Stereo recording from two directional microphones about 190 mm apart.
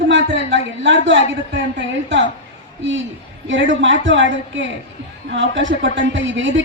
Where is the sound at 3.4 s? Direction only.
75° right (ahead or behind).